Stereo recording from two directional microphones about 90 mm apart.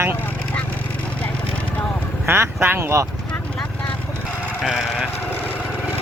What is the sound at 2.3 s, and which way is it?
Speech, 30° right (ahead or behind).